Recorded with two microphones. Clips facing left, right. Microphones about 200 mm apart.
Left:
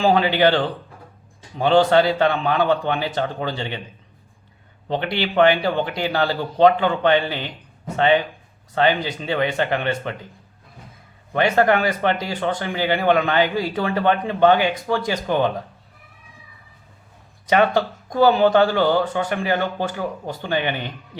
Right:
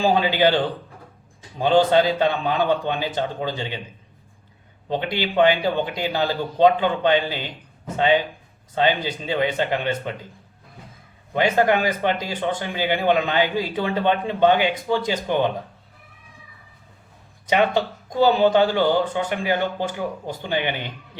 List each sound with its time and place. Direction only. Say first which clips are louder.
0.1 s speech: left 2 dB; 10° right (ahead or behind)
1.6 s speech: left 1 dB; 15° right (ahead or behind)
4.9 s speech: left 1 dB; 15° right (ahead or behind)
9.2 s speech: left 1 dB; 15° right (ahead or behind)
11.3 s speech: left 1 dB; 15° right (ahead or behind)
17.5 s speech: left 2 dB; 20° right (ahead or behind)